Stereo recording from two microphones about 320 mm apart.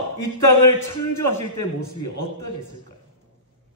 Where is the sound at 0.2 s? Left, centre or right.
Left.